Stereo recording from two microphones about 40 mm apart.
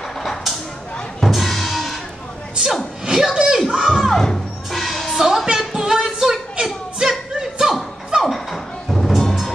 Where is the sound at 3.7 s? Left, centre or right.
Centre.